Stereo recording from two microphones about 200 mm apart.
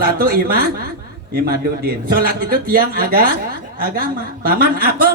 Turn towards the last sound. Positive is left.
turn(degrees=-45)  # may be behind; listen again after turning